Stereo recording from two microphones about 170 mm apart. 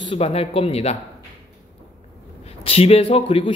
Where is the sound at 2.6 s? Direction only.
35° left (ahead or behind).